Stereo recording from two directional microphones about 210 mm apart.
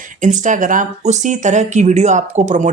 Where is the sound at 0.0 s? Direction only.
35° right (ahead or behind).